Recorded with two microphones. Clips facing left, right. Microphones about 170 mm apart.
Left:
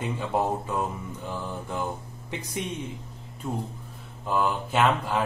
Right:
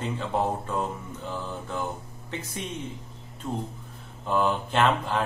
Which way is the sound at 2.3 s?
15° left (ahead or behind).